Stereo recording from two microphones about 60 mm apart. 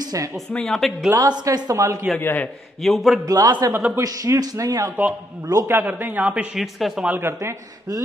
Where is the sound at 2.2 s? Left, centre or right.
Left.